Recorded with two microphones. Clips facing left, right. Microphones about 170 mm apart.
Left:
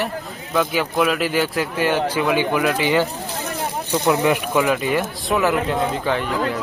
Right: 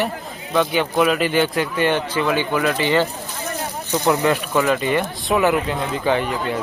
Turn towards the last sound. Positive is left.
turn(degrees=0)  # may be behind; listen again after turning